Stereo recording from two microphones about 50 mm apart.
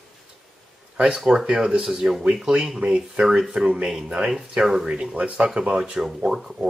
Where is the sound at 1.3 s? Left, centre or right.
Centre.